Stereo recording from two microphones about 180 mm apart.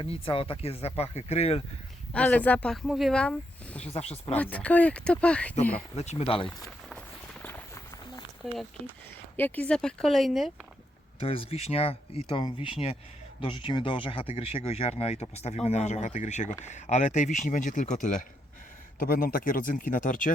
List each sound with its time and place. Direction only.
0.0 s speech: 30° left (ahead or behind)
2.1 s speech: 10° left (ahead or behind)
3.8 s speech: 35° left (ahead or behind)
4.3 s speech: 10° left (ahead or behind)
5.9 s speech: 35° left (ahead or behind)
8.4 s speech: centre (ahead or behind)
9.3 s speech: 10° left (ahead or behind)
11.2 s speech: 30° left (ahead or behind)